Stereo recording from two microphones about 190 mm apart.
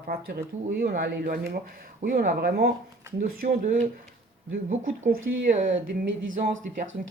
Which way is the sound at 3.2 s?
45° right (ahead or behind).